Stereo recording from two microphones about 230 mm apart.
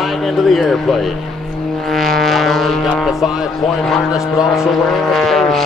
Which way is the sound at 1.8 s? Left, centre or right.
Centre.